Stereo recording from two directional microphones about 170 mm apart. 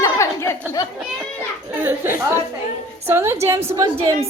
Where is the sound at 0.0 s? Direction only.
20° left (ahead or behind).